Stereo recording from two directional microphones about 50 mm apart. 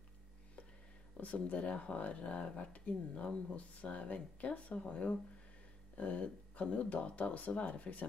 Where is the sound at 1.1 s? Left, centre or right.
Left.